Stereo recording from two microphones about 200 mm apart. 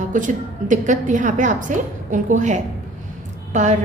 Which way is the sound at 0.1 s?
40° right (ahead or behind).